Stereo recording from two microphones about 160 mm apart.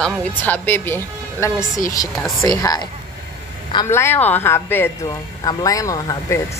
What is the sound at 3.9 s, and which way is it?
A woman's voice, 15° left (ahead or behind).